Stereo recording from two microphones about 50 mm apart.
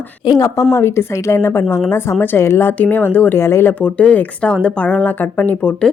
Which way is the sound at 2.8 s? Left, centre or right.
Left.